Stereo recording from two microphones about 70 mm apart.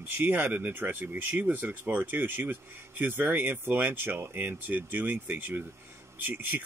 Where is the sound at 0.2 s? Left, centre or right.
Right.